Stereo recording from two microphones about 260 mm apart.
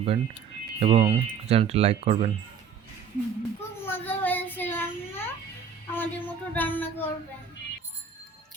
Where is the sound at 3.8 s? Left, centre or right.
Centre.